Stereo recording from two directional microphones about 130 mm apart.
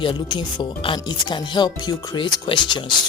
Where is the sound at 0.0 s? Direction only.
40° left (ahead or behind).